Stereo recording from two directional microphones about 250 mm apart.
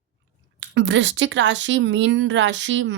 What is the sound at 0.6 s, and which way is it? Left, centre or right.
Speech, right.